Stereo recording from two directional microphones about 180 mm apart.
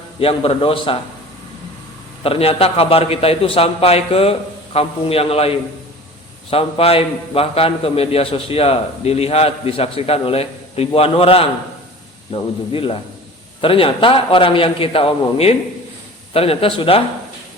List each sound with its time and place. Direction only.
0.2 s a man's voice: 30° left (ahead or behind)
2.2 s a man's voice: 30° left (ahead or behind)